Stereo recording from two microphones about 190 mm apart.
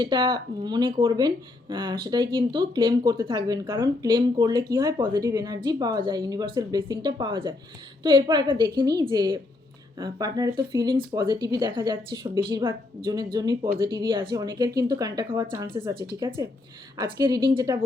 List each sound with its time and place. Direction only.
0.0 s speech: 20° right (ahead or behind)